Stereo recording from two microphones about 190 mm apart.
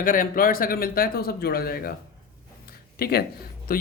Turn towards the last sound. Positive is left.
turn(degrees=50)  # may be behind; listen again after turning